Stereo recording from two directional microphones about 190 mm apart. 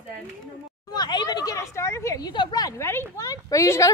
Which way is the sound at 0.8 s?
20° left (ahead or behind).